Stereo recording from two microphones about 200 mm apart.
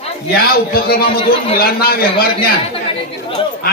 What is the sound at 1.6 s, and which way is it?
Speech, 50° left (ahead or behind).